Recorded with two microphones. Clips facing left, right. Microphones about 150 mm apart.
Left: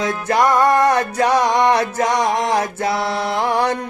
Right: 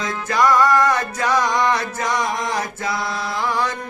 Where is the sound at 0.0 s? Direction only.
55° left (ahead or behind).